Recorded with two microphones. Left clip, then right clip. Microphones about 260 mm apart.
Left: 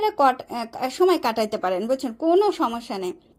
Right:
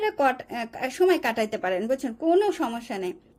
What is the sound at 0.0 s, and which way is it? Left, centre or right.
A woman's voice, centre.